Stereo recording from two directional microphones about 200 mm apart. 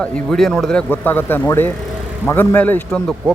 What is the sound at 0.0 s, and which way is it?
A man's voice, centre (ahead or behind).